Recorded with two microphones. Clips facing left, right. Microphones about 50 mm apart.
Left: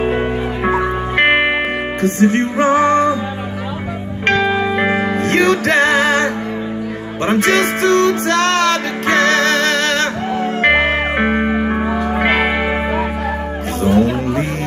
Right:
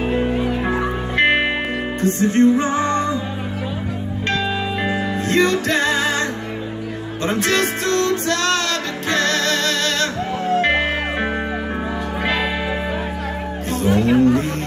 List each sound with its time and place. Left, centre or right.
0.0 s music: left
4.3 s music: left